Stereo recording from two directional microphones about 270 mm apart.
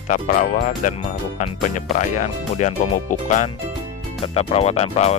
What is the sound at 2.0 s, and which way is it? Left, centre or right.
Speech, left.